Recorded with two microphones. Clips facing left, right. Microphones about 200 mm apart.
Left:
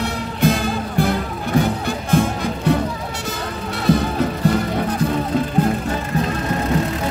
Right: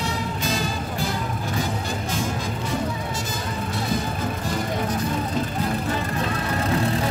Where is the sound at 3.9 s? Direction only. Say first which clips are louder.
Left 12 dB; 65° left (ahead or behind).